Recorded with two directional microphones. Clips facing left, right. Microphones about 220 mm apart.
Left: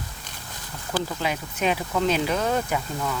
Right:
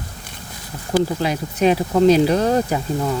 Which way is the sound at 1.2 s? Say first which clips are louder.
Right 8 dB; 35° right (ahead or behind).